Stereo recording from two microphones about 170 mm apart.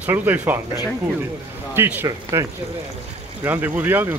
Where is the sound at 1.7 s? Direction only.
15° right (ahead or behind).